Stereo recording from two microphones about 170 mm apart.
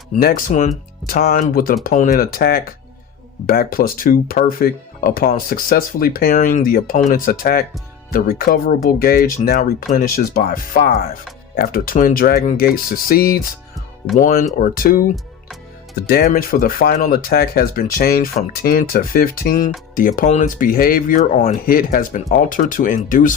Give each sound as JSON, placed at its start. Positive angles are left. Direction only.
{"t": 0.2, "sound": "speech", "side_deg": 60}